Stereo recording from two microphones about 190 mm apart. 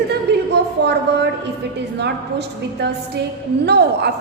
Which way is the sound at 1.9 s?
60° right (ahead or behind).